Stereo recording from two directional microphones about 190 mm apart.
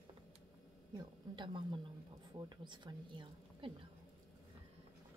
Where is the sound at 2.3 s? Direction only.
25° right (ahead or behind).